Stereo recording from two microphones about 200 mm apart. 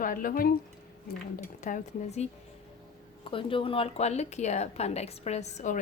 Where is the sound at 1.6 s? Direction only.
40° left (ahead or behind).